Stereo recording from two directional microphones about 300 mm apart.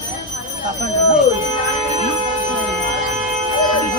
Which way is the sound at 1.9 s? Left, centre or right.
Right.